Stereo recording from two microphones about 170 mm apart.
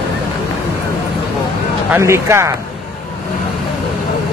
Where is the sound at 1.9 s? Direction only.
15° right (ahead or behind).